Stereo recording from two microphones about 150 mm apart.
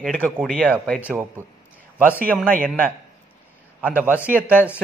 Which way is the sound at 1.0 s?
10° right (ahead or behind).